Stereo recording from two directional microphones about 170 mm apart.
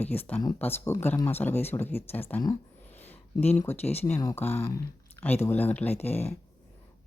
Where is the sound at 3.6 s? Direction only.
15° left (ahead or behind).